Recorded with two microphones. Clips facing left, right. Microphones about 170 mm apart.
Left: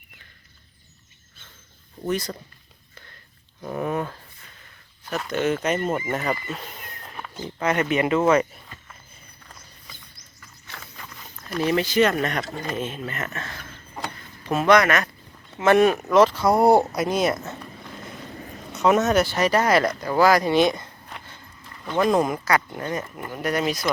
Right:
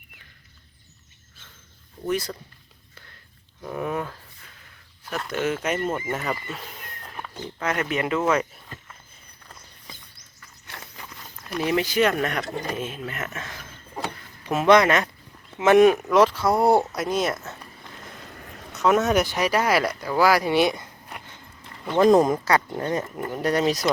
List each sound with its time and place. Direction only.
2.0 s speech: 10° right (ahead or behind)
3.6 s speech: 5° left (ahead or behind)
5.9 s speech: 5° left (ahead or behind)
8.3 s a sound: centre (ahead or behind)
10.9 s a sound: 10° right (ahead or behind)
14.7 s speech: 25° right (ahead or behind)
15.6 s speech: 15° right (ahead or behind)
16.4 s speech: 15° left (ahead or behind)
18.3 s a sound: 30° left (ahead or behind)
19.0 s speech: 15° right (ahead or behind)
20.1 s a sound: 10° right (ahead or behind)
22.2 s speech: 30° right (ahead or behind)